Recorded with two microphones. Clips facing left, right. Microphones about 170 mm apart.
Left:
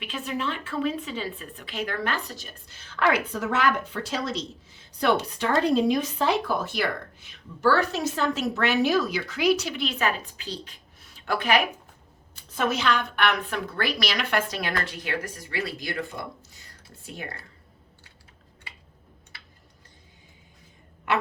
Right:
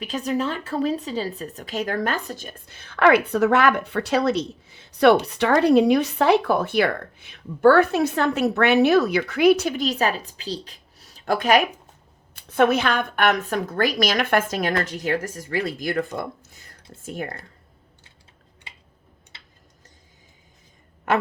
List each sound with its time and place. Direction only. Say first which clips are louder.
0.0 s speech: right 6 dB; 40° right (ahead or behind)
12.3 s speech: right 8 dB; 60° right (ahead or behind); by 17.4 s 45° right (ahead or behind)
19.3 s tick-tock: even; 25° right (ahead or behind)